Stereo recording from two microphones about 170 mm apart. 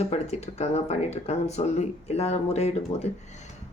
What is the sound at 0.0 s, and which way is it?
Speech, 40° left (ahead or behind).